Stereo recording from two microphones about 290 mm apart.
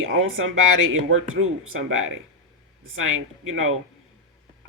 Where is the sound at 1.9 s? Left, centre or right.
Right.